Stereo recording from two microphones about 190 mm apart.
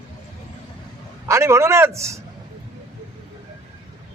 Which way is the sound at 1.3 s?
15° right (ahead or behind).